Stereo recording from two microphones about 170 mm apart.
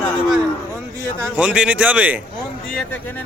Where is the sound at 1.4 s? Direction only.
5° right (ahead or behind).